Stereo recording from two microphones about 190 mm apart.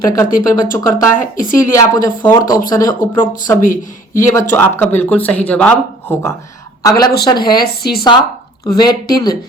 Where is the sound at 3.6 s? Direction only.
45° left (ahead or behind).